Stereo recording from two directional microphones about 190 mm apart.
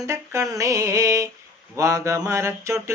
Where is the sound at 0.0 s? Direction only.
15° right (ahead or behind).